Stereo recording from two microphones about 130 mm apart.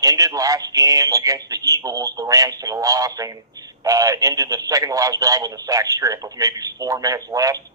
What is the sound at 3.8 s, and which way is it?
Speech, 25° right (ahead or behind).